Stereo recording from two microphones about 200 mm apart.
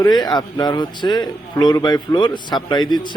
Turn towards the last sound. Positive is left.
turn(degrees=20)  # may be behind; listen again after turning